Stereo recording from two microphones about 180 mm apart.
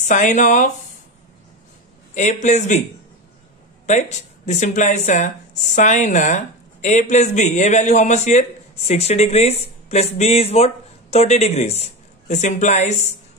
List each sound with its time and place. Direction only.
0.0 s speech: 45° left (ahead or behind)
2.1 s speech: 40° left (ahead or behind)
3.9 s speech: 40° left (ahead or behind)